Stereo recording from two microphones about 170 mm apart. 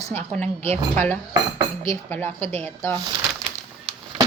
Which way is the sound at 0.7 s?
10° left (ahead or behind).